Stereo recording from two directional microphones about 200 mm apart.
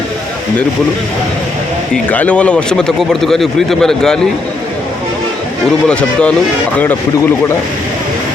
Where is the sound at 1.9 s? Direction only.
5° left (ahead or behind).